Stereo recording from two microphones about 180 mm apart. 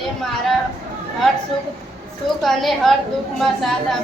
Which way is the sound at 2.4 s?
Centre (ahead or behind).